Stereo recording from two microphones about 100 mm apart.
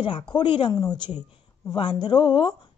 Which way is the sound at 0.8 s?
40° left (ahead or behind).